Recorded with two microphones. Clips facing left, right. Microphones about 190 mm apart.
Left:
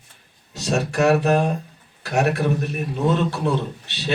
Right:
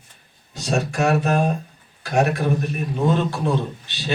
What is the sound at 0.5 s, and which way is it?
A man's voice, 65° left (ahead or behind).